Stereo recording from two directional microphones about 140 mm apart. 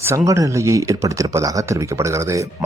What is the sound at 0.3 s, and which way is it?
Speech, 20° right (ahead or behind).